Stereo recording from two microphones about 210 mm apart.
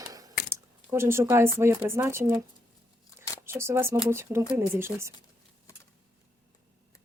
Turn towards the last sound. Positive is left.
turn(degrees=-10)  # may be behind; listen again after turning